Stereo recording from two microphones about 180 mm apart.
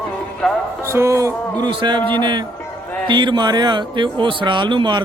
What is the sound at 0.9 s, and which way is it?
Speech, 15° right (ahead or behind).